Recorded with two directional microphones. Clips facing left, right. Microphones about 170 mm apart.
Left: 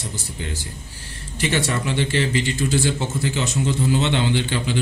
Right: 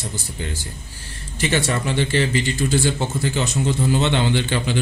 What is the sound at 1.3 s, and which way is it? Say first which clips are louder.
Speech: right 1 dB; 45° right (ahead or behind).